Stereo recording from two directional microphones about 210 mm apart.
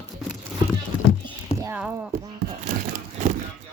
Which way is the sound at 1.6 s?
10° right (ahead or behind).